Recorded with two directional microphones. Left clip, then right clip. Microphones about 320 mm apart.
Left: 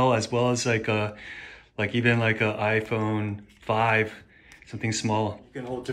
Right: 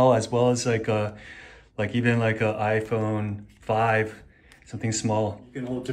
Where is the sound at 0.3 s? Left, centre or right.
Left.